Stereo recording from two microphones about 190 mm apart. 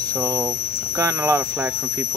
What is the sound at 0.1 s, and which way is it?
Speech, 20° right (ahead or behind).